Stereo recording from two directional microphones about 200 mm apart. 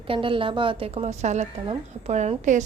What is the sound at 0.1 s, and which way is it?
A woman's voice, 25° right (ahead or behind).